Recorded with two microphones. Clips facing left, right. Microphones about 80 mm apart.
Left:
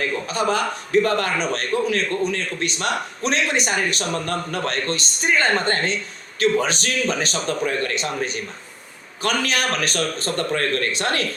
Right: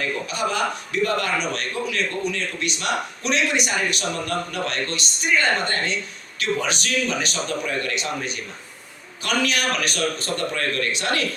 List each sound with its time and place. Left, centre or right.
0.0 s a man's voice: left